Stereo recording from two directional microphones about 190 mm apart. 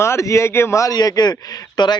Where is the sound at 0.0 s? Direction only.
15° left (ahead or behind).